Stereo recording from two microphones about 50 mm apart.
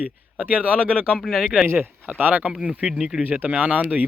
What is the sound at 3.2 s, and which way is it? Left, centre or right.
Speech, right.